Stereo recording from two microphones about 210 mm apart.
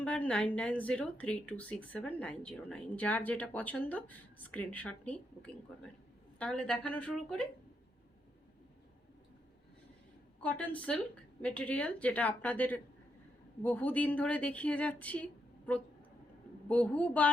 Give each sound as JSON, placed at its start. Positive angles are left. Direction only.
{"t": 0.0, "sound": "a woman's voice", "side_deg": 5}
{"t": 10.4, "sound": "speech", "side_deg": 5}